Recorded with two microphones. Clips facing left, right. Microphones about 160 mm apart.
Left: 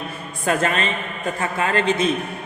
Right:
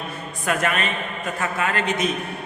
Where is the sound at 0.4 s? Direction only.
30° left (ahead or behind).